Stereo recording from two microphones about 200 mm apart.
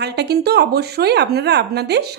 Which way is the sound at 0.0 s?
55° right (ahead or behind).